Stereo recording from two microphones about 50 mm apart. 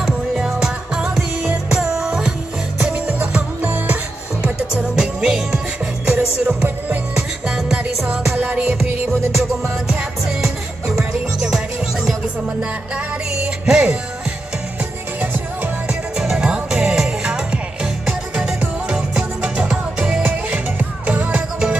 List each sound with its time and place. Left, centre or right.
0.6 s music: centre
2.8 s music: right
4.4 s music: right
8.4 s music: right
9.4 s music: centre
16.3 s music: centre
20.2 s music: right